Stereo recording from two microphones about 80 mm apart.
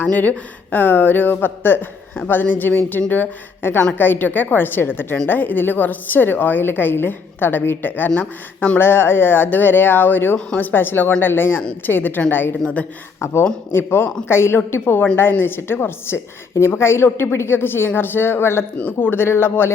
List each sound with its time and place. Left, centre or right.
0.0 s a woman's voice: left
8.8 s a woman's voice: left
13.7 s a woman's voice: left